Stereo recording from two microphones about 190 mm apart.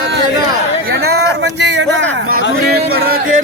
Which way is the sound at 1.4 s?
65° right (ahead or behind).